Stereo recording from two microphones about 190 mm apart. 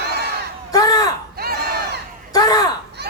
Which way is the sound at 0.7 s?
20° left (ahead or behind).